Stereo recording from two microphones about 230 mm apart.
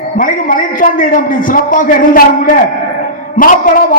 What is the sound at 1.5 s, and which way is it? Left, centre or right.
A man's voice, left.